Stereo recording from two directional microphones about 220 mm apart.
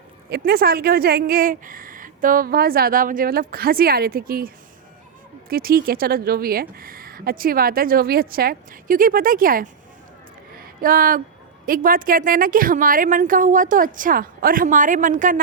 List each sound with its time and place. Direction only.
0.3 s speech: 45° right (ahead or behind)
10.6 s a sound: 40° right (ahead or behind)
11.6 s speech: 40° right (ahead or behind)